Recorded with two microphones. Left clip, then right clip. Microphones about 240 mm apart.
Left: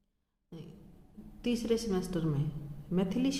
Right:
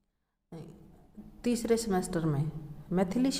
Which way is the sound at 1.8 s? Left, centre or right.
Right.